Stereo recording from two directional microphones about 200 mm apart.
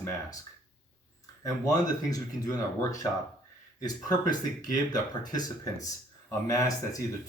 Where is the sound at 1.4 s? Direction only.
15° left (ahead or behind).